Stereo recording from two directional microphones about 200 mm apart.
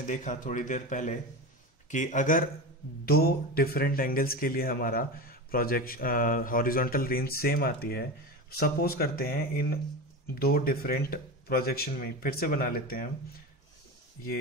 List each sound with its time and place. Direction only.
0.0 s a man's voice: 40° left (ahead or behind)